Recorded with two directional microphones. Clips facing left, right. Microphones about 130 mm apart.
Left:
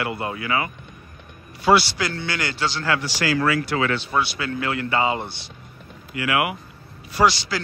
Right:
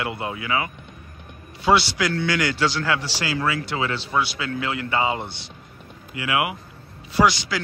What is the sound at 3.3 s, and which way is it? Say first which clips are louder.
Speech: left 2 dB; 20° right (ahead or behind).